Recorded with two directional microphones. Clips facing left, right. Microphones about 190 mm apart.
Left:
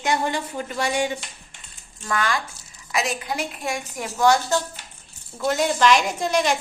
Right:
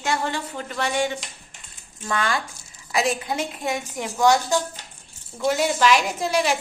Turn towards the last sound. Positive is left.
turn(degrees=-5)  # may be behind; listen again after turning